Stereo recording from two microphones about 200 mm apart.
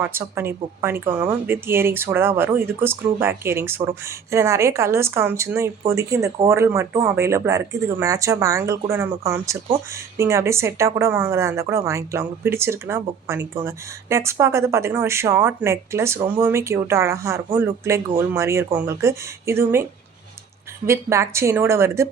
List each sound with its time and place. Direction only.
0.0 s a woman's voice: 10° right (ahead or behind)
20.8 s a woman's voice: 15° right (ahead or behind)